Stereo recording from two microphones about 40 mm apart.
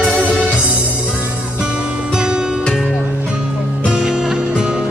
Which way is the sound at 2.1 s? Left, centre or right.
Centre.